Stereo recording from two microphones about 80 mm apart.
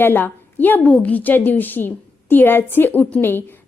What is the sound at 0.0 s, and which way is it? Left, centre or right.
A woman's voice, left.